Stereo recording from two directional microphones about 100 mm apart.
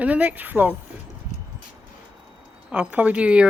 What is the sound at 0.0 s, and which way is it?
Speech, 15° right (ahead or behind).